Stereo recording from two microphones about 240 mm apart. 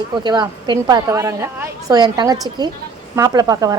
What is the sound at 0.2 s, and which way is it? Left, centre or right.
A woman's voice, centre.